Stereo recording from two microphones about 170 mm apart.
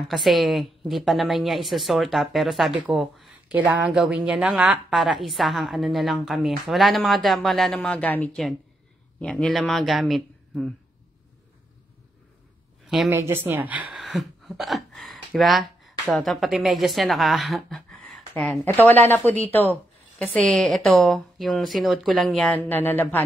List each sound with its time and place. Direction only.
0.1 s a woman's voice: centre (ahead or behind)
12.8 s a sound: centre (ahead or behind)
13.1 s a woman's voice: 15° right (ahead or behind); by 23.2 s 10° left (ahead or behind)